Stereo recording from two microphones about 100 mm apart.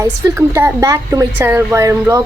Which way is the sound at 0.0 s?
30° right (ahead or behind).